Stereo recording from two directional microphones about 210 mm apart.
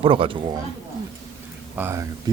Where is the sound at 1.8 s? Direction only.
10° right (ahead or behind).